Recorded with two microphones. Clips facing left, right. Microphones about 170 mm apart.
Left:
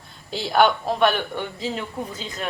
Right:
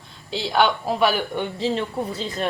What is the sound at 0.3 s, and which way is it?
Speech, centre (ahead or behind).